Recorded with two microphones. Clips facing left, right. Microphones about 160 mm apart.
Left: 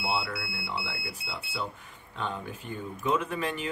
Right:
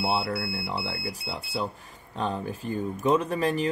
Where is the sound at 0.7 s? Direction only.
35° right (ahead or behind).